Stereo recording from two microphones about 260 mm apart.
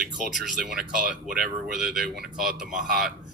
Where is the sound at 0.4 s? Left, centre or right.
Centre.